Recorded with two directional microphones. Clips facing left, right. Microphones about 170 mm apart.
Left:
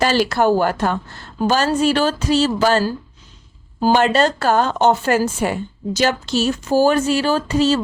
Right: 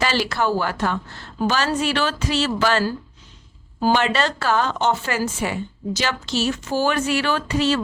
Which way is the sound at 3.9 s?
45° left (ahead or behind).